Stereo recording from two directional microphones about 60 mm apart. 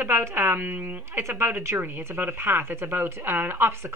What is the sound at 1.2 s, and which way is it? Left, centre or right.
A woman's voice, right.